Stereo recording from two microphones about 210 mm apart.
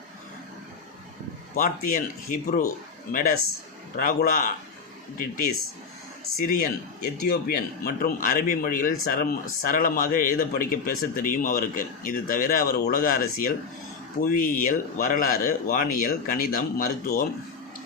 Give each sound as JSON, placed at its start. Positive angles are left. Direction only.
{"t": 1.5, "sound": "a man's voice", "side_deg": 40}
{"t": 6.4, "sound": "a man's voice", "side_deg": 45}